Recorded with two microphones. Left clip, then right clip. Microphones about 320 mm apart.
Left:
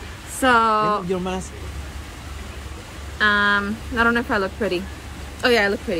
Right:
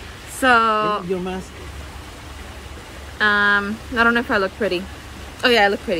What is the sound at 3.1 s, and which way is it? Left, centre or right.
Speech, centre.